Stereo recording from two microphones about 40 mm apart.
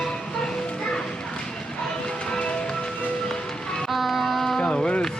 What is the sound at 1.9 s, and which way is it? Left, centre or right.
Music, centre.